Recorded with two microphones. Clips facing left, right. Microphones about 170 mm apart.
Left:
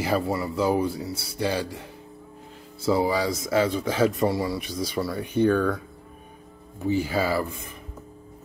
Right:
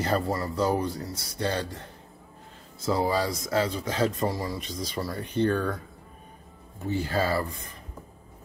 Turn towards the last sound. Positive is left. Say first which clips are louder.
# left 2 dB
turn(degrees=5)  # may be behind; listen again after turning